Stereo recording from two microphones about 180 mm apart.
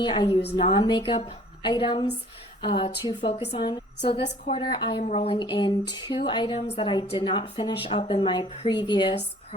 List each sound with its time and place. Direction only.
0.0 s a woman's voice: 25° left (ahead or behind)